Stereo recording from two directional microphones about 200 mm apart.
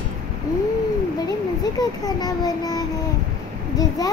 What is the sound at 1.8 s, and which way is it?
A child's voice, 20° left (ahead or behind).